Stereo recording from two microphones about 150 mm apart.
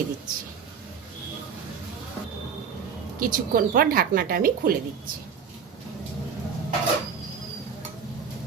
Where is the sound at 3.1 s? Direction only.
75° right (ahead or behind).